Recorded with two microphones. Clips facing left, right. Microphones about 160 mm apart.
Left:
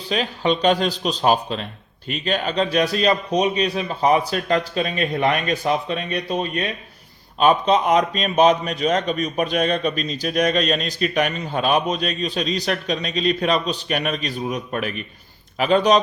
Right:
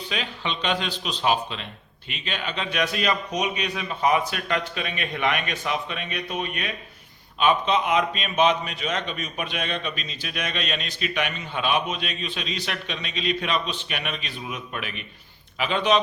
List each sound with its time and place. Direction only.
0.1 s a man's voice: 40° left (ahead or behind)